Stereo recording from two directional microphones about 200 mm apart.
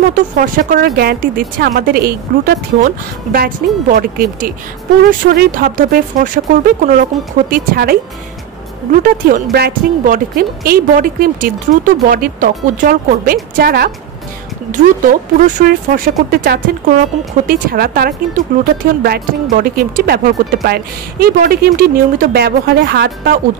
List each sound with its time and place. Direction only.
0.1 s a woman's voice: 45° right (ahead or behind)